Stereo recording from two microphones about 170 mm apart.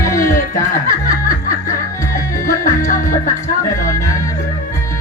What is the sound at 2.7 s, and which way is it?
Music, 20° left (ahead or behind).